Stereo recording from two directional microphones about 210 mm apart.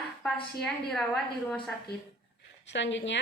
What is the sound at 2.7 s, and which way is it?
Speech, 60° left (ahead or behind).